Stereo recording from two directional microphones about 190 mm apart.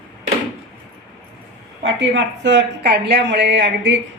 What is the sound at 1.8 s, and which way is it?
Speech, 70° right (ahead or behind).